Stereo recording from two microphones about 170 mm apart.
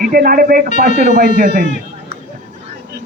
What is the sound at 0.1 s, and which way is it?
Speech, 60° right (ahead or behind).